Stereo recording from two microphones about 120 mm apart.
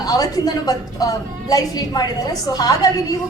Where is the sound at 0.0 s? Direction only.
30° left (ahead or behind).